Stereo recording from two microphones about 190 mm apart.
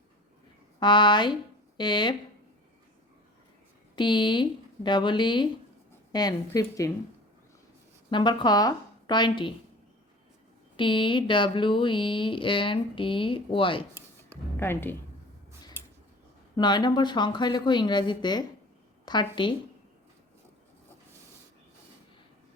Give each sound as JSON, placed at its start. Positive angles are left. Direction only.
{"t": 0.8, "sound": "speech", "side_deg": 25}
{"t": 3.9, "sound": "speech", "side_deg": 25}
{"t": 8.1, "sound": "speech", "side_deg": 25}
{"t": 10.8, "sound": "speech", "side_deg": 25}
{"t": 14.5, "sound": "a woman's voice", "side_deg": 10}
{"t": 16.6, "sound": "speech", "side_deg": 20}